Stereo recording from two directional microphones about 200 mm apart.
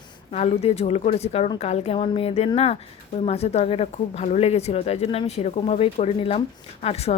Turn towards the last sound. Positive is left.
turn(degrees=30)  # may be behind; listen again after turning